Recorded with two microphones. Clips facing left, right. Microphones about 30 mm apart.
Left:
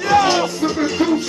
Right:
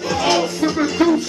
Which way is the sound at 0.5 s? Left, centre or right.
Centre.